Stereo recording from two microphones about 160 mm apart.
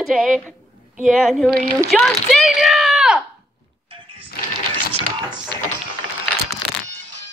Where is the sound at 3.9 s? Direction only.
35° right (ahead or behind).